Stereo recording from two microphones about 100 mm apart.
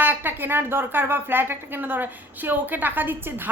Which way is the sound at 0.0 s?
20° right (ahead or behind).